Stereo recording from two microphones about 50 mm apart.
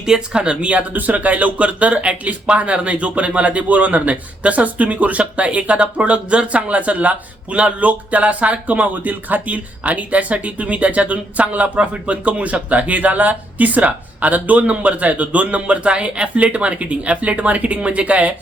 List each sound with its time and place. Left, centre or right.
0.0 s speech: centre